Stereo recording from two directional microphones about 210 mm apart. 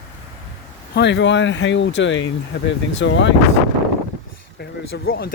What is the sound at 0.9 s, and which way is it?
Speech, 55° left (ahead or behind).